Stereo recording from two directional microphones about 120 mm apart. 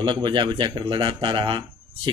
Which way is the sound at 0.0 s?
40° right (ahead or behind).